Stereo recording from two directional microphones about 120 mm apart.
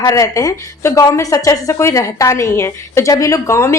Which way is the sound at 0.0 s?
30° left (ahead or behind).